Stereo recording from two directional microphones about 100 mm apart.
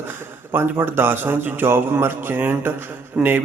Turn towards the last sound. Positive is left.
turn(degrees=-20)  # may be behind; listen again after turning